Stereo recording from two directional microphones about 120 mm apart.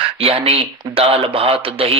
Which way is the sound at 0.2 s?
55° right (ahead or behind).